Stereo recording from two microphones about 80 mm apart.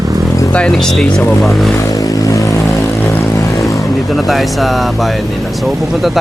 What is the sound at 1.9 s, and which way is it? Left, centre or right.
Vehicle, left.